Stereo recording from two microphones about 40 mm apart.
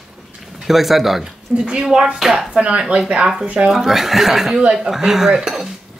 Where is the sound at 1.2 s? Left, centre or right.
Right.